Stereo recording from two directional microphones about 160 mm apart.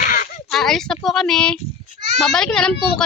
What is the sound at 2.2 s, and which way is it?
Speech, centre (ahead or behind).